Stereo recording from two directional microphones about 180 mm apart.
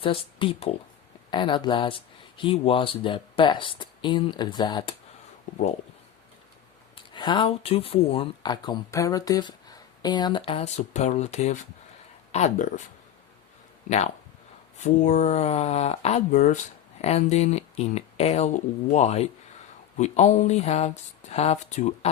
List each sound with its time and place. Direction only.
0.0 s speech: 30° left (ahead or behind)
6.9 s speech: 25° left (ahead or behind); by 12.8 s 40° left (ahead or behind)
13.9 s speech: 45° left (ahead or behind)